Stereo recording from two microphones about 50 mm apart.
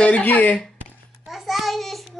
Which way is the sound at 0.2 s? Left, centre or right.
Left.